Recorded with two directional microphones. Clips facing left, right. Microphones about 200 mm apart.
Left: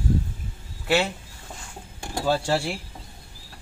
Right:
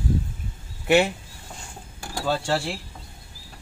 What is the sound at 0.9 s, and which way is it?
Speech, 15° right (ahead or behind).